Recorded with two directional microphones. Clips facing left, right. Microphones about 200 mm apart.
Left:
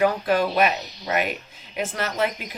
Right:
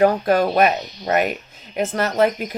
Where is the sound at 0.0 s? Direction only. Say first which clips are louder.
Right 5 dB; 45° right (ahead or behind).